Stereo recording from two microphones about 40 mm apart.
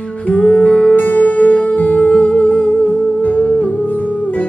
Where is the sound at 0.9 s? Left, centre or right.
Left.